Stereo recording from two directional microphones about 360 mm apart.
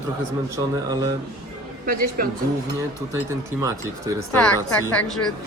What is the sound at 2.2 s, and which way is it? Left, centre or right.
Speech, right.